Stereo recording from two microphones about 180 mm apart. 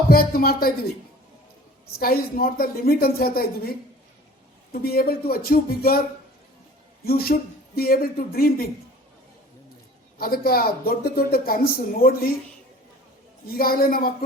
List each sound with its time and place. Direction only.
0.1 s speech: 55° left (ahead or behind)
2.0 s speech: 55° left (ahead or behind)
4.7 s speech: 55° left (ahead or behind)
7.0 s speech: 60° left (ahead or behind)
10.2 s speech: 55° left (ahead or behind)
13.5 s speech: 55° left (ahead or behind)